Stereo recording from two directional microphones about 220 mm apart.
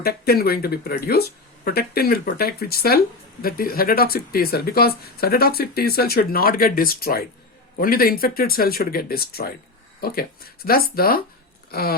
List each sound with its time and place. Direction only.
0.0 s speech: 45° left (ahead or behind)